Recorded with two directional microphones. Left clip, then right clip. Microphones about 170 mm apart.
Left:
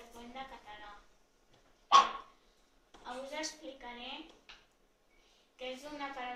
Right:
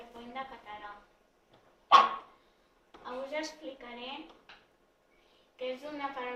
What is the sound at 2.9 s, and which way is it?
Speech, 20° right (ahead or behind).